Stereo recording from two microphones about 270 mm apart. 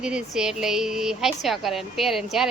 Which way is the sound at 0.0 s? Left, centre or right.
Centre.